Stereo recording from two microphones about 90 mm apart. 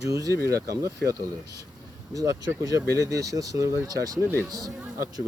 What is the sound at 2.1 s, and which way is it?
Speech, 40° right (ahead or behind).